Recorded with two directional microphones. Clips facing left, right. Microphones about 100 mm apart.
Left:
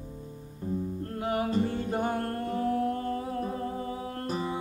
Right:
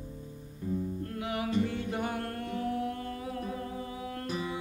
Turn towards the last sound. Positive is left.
turn(degrees=35)  # may be behind; listen again after turning